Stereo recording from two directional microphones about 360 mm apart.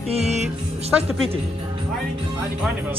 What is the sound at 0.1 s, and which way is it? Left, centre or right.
Music, centre.